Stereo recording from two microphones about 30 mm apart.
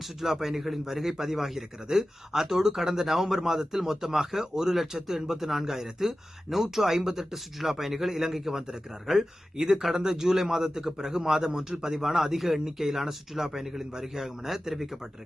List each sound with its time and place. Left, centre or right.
0.0 s a man's voice: centre
11.9 s a man's voice: centre